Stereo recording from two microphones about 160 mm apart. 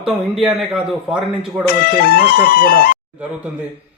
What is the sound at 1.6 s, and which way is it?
Speech, 70° left (ahead or behind).